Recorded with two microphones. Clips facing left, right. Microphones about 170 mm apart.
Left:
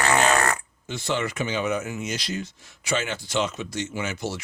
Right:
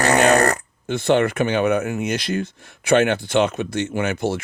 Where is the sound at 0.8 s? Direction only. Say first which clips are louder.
Right 10 dB; 55° right (ahead or behind).